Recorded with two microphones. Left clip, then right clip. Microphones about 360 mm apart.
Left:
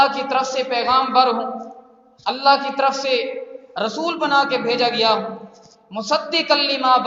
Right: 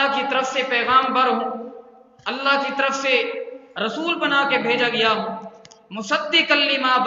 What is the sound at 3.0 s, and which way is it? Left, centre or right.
Speech, left.